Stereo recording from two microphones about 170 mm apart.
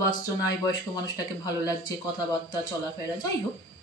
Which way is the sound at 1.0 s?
20° left (ahead or behind).